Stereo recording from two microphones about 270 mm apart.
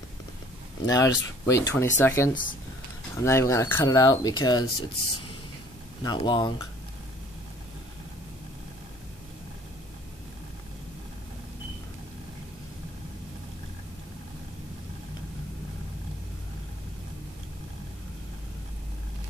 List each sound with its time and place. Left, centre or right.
0.8 s speech: centre
6.0 s speech: centre